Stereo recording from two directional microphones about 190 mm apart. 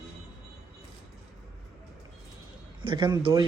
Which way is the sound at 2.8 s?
25° right (ahead or behind).